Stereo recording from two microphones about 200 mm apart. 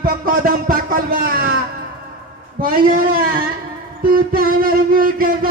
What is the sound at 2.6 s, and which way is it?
Speech, 45° right (ahead or behind).